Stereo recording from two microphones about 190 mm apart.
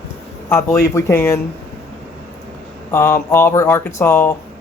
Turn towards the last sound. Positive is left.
turn(degrees=10)  # may be behind; listen again after turning